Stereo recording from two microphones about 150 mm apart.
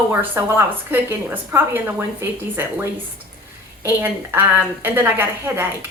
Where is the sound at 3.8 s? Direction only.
15° right (ahead or behind).